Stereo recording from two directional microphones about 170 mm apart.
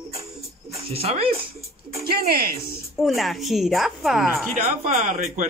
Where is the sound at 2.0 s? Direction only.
65° right (ahead or behind).